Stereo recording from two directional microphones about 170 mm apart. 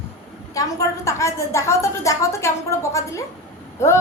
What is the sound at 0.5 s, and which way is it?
A woman's voice, 20° left (ahead or behind).